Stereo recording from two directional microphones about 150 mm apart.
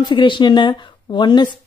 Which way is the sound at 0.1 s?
30° left (ahead or behind).